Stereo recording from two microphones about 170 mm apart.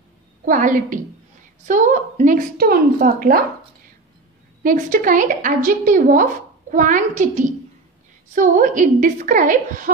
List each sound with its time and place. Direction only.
0.5 s a woman's voice: 50° right (ahead or behind)
4.6 s a woman's voice: 55° right (ahead or behind)